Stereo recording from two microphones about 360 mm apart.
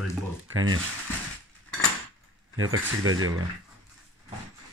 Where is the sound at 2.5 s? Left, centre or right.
Right.